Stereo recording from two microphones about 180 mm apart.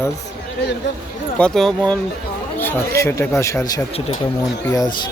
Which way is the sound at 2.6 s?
15° left (ahead or behind).